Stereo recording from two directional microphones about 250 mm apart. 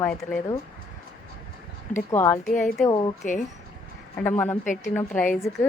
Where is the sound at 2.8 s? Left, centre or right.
Centre.